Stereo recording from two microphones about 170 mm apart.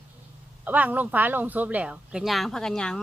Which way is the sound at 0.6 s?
10° right (ahead or behind).